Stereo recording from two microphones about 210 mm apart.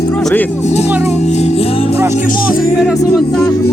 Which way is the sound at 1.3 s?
30° left (ahead or behind).